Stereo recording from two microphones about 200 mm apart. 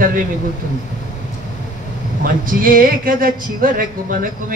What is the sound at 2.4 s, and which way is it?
Speech, 45° right (ahead or behind).